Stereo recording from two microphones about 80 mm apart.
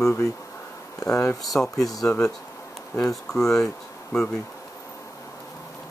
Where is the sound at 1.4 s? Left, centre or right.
Centre.